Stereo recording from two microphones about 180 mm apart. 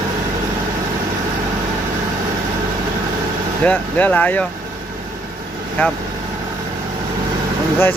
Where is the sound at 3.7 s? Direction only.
10° left (ahead or behind).